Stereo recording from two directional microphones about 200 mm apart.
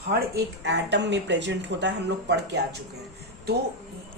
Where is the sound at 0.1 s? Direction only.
55° right (ahead or behind).